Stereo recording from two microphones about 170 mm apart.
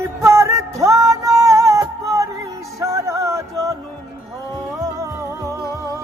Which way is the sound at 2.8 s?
20° right (ahead or behind).